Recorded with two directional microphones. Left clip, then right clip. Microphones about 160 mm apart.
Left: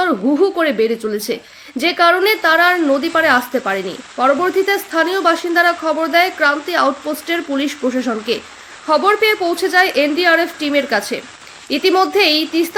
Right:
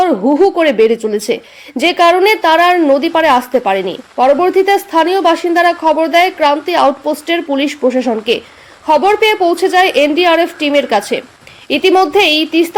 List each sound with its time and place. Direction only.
0.6 s speech: 15° right (ahead or behind)